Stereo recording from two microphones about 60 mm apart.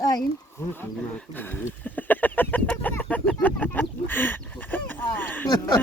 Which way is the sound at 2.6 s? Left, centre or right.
Left.